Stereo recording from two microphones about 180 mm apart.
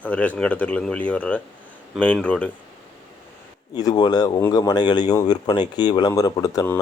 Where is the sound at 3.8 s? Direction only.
25° left (ahead or behind).